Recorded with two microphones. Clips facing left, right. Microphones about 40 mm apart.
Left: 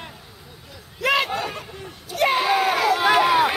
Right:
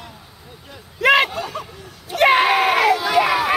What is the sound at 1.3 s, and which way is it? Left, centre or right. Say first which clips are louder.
Speech: even; left.